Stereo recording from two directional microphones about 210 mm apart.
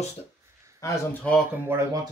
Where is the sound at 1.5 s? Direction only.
10° right (ahead or behind).